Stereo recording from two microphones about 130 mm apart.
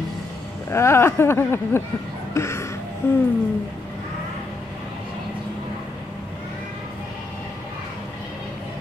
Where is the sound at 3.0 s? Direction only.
20° left (ahead or behind).